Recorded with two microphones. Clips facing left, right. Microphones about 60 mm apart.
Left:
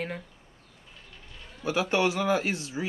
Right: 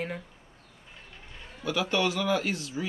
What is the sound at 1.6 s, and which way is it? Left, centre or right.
A man's voice, left.